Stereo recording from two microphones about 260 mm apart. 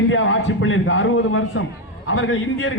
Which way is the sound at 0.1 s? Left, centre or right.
Left.